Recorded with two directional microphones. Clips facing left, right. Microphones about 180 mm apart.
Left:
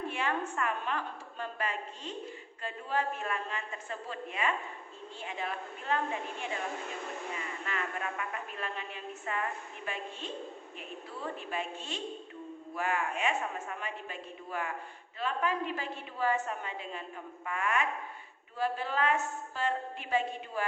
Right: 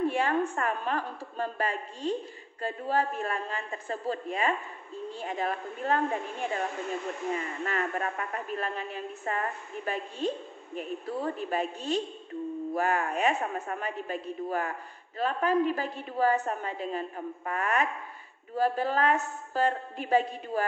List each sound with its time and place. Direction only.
0.1 s a woman's voice: 35° right (ahead or behind)